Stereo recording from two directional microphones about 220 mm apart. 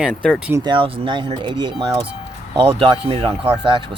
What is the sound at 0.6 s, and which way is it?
Speech, 20° right (ahead or behind).